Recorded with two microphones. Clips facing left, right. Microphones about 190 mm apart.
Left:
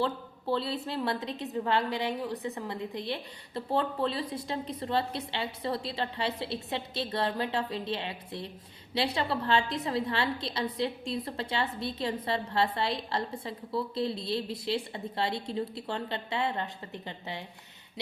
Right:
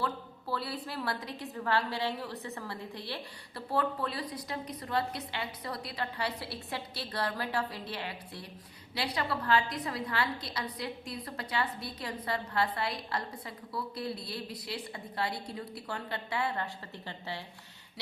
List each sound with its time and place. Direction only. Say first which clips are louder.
0.0 s a woman's voice: left 5 dB; 25° left (ahead or behind)